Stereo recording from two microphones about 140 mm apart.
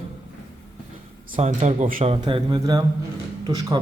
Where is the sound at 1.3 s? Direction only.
50° right (ahead or behind).